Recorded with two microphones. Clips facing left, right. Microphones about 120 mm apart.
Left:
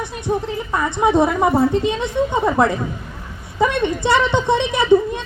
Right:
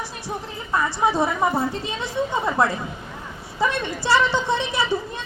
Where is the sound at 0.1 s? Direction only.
20° left (ahead or behind).